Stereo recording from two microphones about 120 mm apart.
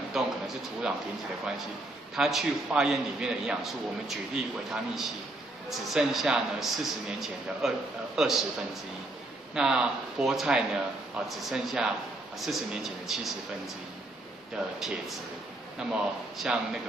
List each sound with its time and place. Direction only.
0.1 s a man's voice: 5° right (ahead or behind)
2.1 s a man's voice: 5° right (ahead or behind)
14.8 s a man's voice: centre (ahead or behind)